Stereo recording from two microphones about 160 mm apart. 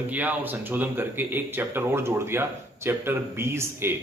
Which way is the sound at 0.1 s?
10° right (ahead or behind).